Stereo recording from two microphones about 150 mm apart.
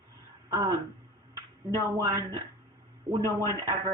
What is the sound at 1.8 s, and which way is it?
Speech, 25° right (ahead or behind).